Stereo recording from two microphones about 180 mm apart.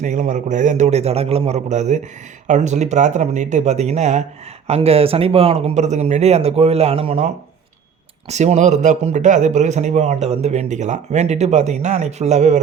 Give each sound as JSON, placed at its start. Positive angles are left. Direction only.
{"t": 0.0, "sound": "speech", "side_deg": -45}
{"t": 8.3, "sound": "speech", "side_deg": -40}